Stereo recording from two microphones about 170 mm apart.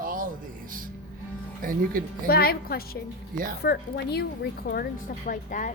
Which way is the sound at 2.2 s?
65° left (ahead or behind).